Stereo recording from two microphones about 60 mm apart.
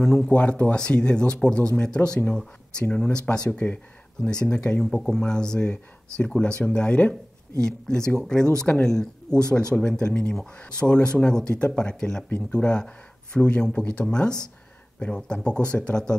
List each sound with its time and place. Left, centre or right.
0.0 s speech: centre
0.3 s speech: left
8.7 s speech: left
9.4 s speech: centre